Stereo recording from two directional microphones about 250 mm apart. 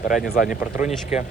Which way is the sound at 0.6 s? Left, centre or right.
Centre.